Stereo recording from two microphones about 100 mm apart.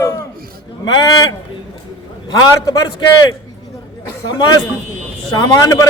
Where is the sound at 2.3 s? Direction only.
40° left (ahead or behind).